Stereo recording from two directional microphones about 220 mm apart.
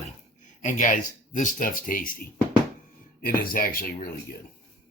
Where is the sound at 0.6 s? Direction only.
35° left (ahead or behind).